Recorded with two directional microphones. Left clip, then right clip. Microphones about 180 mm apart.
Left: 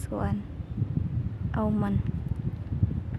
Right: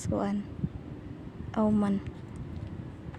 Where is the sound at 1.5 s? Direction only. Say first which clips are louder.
Right 1 dB; 10° right (ahead or behind).